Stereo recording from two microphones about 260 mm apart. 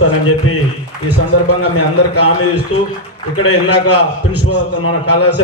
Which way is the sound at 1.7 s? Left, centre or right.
Left.